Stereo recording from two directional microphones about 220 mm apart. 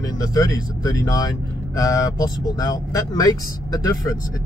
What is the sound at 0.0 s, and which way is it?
Speech, 15° left (ahead or behind).